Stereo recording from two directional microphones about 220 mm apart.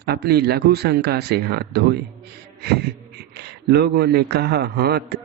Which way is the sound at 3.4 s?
45° right (ahead or behind).